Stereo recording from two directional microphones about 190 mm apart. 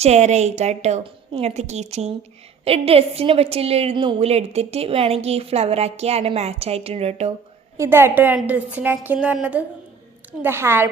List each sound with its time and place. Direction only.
0.0 s a woman's voice: 35° right (ahead or behind)
7.8 s a woman's voice: 10° right (ahead or behind)